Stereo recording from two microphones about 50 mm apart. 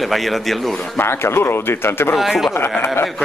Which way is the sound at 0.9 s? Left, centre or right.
Left.